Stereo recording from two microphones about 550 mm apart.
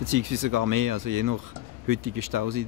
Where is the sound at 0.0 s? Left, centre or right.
Right.